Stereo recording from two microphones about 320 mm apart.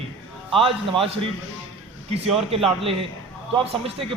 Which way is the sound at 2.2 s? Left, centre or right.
Centre.